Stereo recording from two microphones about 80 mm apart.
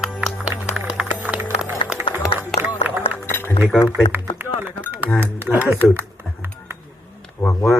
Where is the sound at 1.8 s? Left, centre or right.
Left.